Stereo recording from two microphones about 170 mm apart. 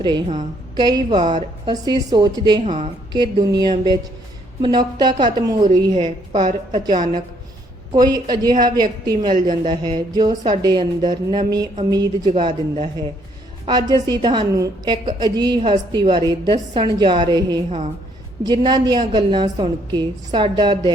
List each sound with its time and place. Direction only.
0.0 s speech: 25° right (ahead or behind)
2.6 s a woman's voice: 40° right (ahead or behind)
3.1 s speech: 25° right (ahead or behind)
8.0 s speech: 25° right (ahead or behind)